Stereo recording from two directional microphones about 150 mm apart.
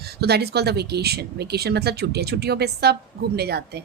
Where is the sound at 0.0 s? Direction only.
90° right.